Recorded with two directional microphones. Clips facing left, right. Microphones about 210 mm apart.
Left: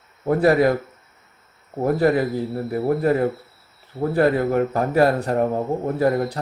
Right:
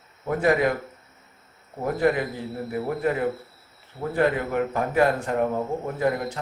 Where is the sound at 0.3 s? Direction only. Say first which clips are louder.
Left 5 dB; 35° left (ahead or behind).